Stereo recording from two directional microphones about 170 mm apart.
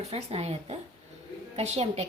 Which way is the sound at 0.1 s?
35° right (ahead or behind).